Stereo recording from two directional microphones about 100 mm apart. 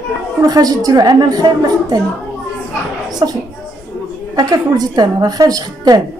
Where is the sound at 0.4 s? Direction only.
40° right (ahead or behind).